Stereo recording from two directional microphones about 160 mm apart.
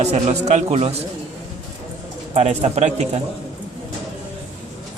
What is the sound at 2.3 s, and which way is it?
Speech, 40° right (ahead or behind).